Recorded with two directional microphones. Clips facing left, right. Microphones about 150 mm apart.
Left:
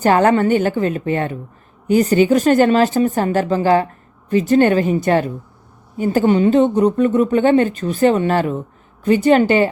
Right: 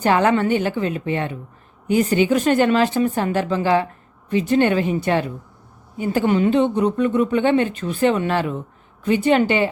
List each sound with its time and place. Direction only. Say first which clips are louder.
0.0 s a woman's voice: left 4 dB; 45° left (ahead or behind)